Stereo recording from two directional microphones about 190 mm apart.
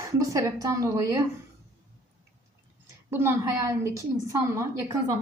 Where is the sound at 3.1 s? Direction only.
15° right (ahead or behind).